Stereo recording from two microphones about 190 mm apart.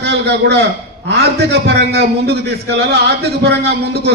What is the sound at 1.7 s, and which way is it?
A man's voice, 55° right (ahead or behind).